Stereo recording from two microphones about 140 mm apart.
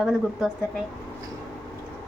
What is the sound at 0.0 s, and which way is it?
Speech, centre (ahead or behind).